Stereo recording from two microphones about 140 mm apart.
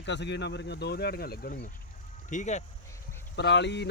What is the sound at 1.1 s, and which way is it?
Speech, 90° left.